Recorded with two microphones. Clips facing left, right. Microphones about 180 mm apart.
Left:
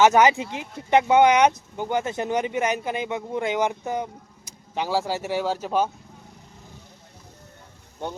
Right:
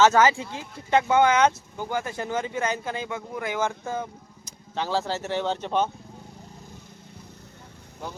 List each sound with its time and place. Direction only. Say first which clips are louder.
0.0 s speech: left 2 dB; 15° left (ahead or behind)